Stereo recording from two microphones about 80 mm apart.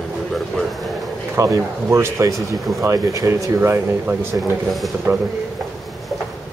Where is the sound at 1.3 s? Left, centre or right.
Right.